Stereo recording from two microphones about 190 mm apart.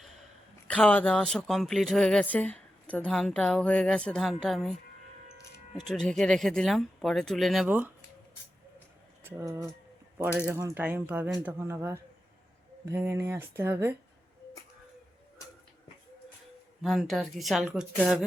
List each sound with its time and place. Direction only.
0.7 s speech: 5° left (ahead or behind)
5.9 s speech: centre (ahead or behind)
9.2 s speech: 15° right (ahead or behind)
16.8 s speech: centre (ahead or behind)